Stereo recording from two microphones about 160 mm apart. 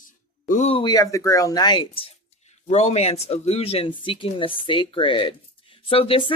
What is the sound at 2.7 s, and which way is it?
Speech, 45° left (ahead or behind).